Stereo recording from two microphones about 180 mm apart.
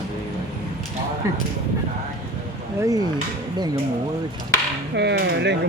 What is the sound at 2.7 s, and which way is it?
Speech, 20° right (ahead or behind).